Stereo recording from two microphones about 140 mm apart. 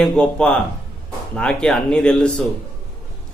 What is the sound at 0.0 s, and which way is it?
Speech, 5° left (ahead or behind).